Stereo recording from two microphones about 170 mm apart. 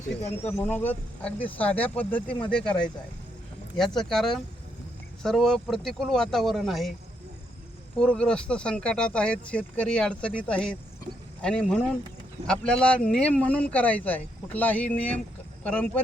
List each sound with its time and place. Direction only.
0.2 s speech: 40° left (ahead or behind)
0.5 s speech: 10° left (ahead or behind)
7.9 s speech: 5° left (ahead or behind)